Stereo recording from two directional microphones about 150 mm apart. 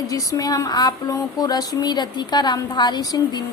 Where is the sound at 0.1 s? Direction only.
25° left (ahead or behind).